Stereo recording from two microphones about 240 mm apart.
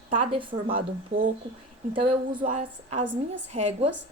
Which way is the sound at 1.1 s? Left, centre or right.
Right.